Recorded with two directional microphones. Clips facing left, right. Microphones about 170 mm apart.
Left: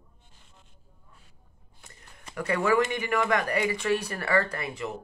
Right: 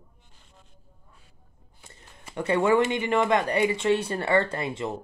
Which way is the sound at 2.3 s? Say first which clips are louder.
Right 3 dB; 25° right (ahead or behind).